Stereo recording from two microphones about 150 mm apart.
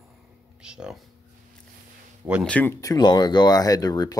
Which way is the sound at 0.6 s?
5° right (ahead or behind).